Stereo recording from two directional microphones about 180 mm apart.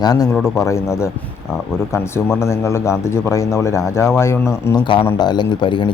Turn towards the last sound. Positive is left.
turn(degrees=25)  # may be behind; listen again after turning